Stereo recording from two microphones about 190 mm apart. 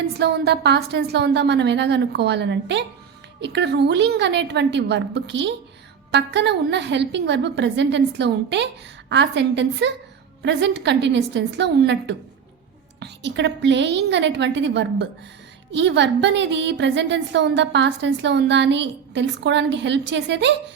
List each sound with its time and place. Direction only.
0.1 s a woman's voice: 60° right (ahead or behind)